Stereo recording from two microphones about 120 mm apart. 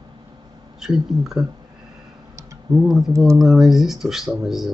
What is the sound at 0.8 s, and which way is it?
Speech, centre (ahead or behind).